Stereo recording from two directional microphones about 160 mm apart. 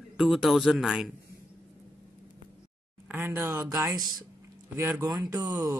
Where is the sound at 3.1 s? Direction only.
15° right (ahead or behind).